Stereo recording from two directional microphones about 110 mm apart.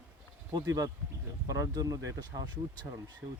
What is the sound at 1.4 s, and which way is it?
Speech, 30° right (ahead or behind).